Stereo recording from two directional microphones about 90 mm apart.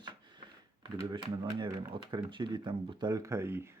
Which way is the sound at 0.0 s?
55° right (ahead or behind).